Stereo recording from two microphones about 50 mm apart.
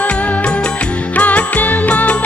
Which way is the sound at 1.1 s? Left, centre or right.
Left.